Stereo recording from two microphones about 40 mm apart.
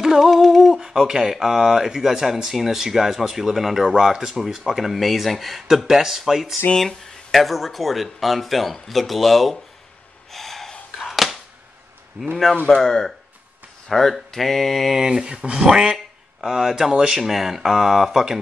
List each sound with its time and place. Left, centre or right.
0.0 s a sound: centre
2.5 s speech: centre
6.9 s speech: centre
10.3 s snort: centre
11.0 s a sound: centre
12.7 s speech: centre
15.0 s speech: centre